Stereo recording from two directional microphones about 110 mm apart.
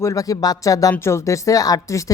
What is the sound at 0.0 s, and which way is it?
Speech, 30° left (ahead or behind).